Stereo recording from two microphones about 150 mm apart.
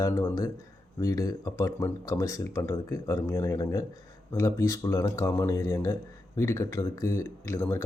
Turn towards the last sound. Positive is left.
turn(degrees=15)  # may be behind; listen again after turning